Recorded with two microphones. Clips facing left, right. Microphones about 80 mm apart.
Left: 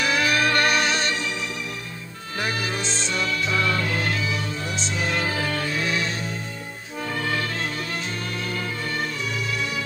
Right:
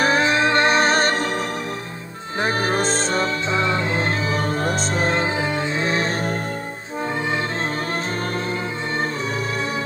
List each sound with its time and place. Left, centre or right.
0.0 s music: right
2.4 s music: right
3.4 s music: right
4.3 s music: right
5.2 s music: right